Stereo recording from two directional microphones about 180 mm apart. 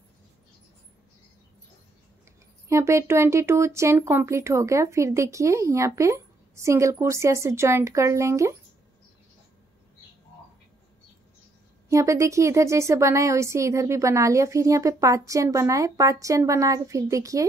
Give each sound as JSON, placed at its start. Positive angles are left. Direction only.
{"t": 2.7, "sound": "speech", "side_deg": -15}
{"t": 11.9, "sound": "speech", "side_deg": -15}